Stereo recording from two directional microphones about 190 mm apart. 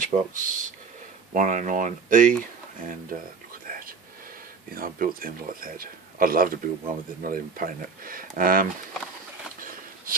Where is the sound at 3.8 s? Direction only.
50° right (ahead or behind).